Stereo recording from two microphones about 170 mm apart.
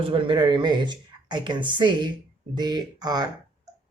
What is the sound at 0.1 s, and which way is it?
Speech, 30° right (ahead or behind).